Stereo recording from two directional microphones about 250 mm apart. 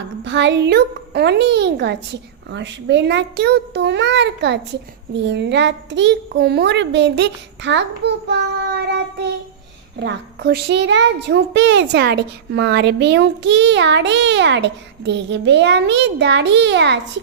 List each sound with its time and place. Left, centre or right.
0.3 s a child's voice: right